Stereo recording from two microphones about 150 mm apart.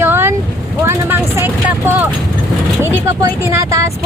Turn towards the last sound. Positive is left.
turn(degrees=-20)  # may be behind; listen again after turning